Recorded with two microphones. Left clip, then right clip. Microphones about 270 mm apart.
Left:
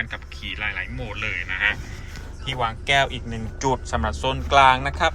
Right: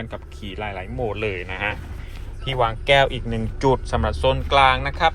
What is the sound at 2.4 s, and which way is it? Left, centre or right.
Speech, centre.